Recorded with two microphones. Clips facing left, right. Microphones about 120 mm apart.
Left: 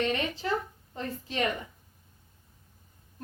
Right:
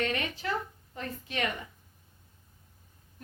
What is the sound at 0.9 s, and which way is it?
Speech, 30° left (ahead or behind).